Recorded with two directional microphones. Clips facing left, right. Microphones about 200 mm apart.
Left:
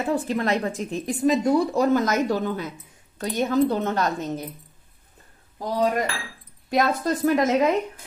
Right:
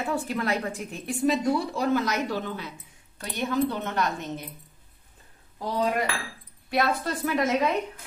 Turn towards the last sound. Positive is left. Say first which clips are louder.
# left 5 dB
turn(degrees=45)  # may be behind; listen again after turning